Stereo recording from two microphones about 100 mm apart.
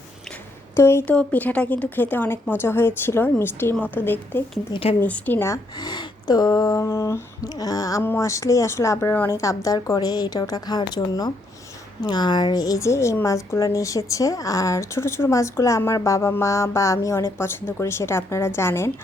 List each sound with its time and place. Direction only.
0.8 s a woman's voice: 25° left (ahead or behind)
1.0 s a woman's voice: 15° left (ahead or behind)
4.7 s speech: 70° left (ahead or behind)
4.9 s speech: 15° left (ahead or behind)
5.7 s a sound: 45° left (ahead or behind); by 9.1 s 30° left (ahead or behind)
9.1 s a woman's voice: 25° left (ahead or behind); by 11.3 s 45° left (ahead or behind)
12.0 s a sound: 45° left (ahead or behind); by 13.7 s 30° left (ahead or behind)
13.7 s a woman's voice: 35° left (ahead or behind)